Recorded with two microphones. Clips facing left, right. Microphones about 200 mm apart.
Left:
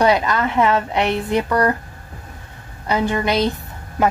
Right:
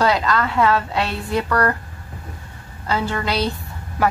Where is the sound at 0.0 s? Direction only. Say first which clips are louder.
Left 2 dB; 20° left (ahead or behind).